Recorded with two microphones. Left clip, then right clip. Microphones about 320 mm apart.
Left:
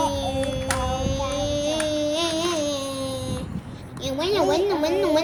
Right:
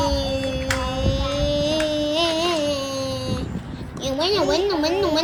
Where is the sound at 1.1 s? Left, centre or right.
Centre.